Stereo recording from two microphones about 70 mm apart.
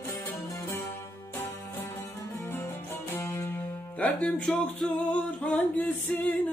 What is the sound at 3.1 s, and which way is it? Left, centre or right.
Music, left.